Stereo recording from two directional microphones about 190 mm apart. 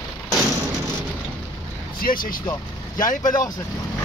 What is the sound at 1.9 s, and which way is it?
Vehicle, 50° left (ahead or behind).